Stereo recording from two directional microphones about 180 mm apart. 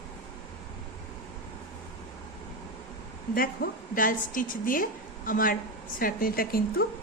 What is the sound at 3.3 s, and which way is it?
A woman's voice, 55° left (ahead or behind).